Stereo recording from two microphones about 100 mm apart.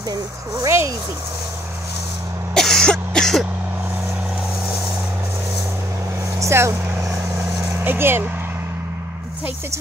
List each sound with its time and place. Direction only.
0.6 s speech: 30° right (ahead or behind)
2.5 s cough: 5° left (ahead or behind)
6.4 s vehicle: 25° right (ahead or behind)
7.7 s speech: 20° right (ahead or behind)